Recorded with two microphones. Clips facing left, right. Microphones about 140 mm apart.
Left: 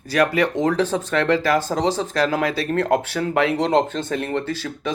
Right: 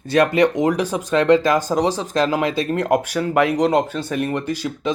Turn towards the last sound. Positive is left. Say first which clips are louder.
# right 3 dB
turn(degrees=-15)  # may be behind; listen again after turning